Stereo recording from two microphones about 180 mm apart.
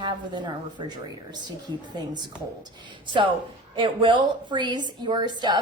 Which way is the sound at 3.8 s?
25° right (ahead or behind).